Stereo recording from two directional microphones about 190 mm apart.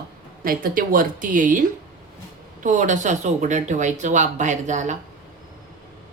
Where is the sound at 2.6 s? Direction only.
40° right (ahead or behind).